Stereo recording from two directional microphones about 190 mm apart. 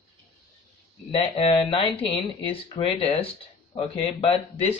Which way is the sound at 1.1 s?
30° left (ahead or behind).